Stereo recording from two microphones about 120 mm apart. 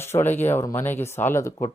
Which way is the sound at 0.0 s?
20° left (ahead or behind).